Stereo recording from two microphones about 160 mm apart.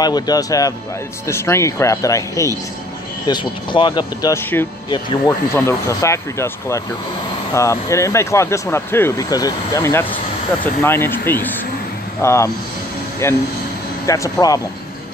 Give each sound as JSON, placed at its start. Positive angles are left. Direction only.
{"t": 0.0, "sound": "speech", "side_deg": 25}